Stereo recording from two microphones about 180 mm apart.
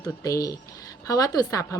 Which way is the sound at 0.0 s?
20° left (ahead or behind).